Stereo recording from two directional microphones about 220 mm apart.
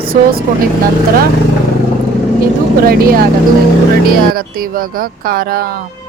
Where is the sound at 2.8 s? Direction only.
45° right (ahead or behind).